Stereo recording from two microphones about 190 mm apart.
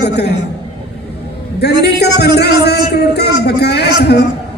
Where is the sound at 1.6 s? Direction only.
60° left (ahead or behind).